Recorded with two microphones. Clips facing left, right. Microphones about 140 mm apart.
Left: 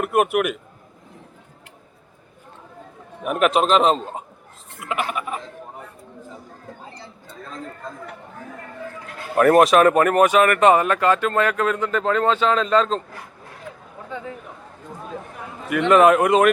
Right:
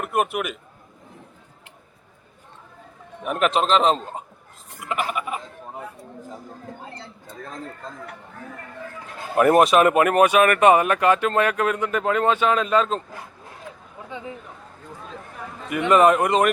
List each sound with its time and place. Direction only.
0.0 s a man's voice: 5° left (ahead or behind)
3.2 s speech: 5° left (ahead or behind)
9.4 s speech: 5° right (ahead or behind)
9.8 s speech: 15° right (ahead or behind)
15.1 s a sound: 5° left (ahead or behind)
15.8 s speech: centre (ahead or behind)